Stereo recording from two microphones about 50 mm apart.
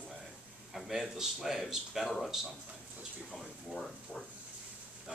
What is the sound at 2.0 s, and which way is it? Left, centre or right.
Speech, centre.